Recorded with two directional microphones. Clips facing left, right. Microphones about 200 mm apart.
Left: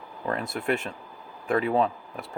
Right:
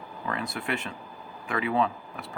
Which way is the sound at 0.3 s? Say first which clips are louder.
Left 4 dB; 45° left (ahead or behind).